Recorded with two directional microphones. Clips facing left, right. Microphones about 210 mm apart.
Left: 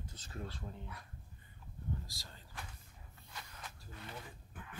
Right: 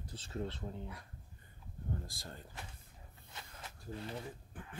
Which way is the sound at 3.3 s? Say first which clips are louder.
Even; 25° right (ahead or behind).